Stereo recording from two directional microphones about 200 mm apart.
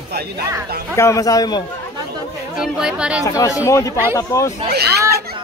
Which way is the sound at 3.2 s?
15° left (ahead or behind).